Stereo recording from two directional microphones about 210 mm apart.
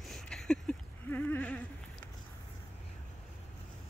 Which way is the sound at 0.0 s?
Centre (ahead or behind).